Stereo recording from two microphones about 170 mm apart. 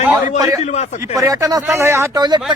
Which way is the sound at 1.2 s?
20° right (ahead or behind).